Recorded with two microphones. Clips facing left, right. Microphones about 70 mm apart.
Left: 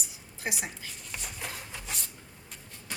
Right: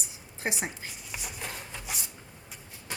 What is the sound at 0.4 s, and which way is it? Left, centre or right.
Speech, right.